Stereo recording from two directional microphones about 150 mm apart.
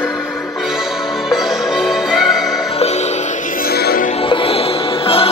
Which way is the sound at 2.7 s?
45° left (ahead or behind).